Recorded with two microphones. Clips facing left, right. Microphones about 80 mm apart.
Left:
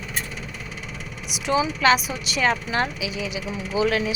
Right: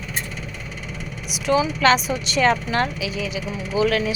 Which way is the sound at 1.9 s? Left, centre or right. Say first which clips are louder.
Right 2 dB; centre.